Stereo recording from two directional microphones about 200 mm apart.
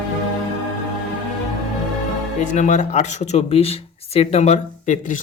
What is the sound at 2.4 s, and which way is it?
Speech, 40° left (ahead or behind).